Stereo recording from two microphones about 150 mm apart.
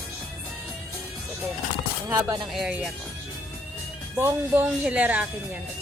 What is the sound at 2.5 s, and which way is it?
Speech, 5° right (ahead or behind).